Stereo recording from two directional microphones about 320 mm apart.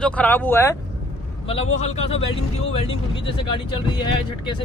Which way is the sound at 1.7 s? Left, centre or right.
Centre.